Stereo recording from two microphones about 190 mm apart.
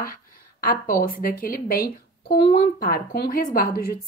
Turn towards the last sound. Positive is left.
turn(degrees=50)  # may be behind; listen again after turning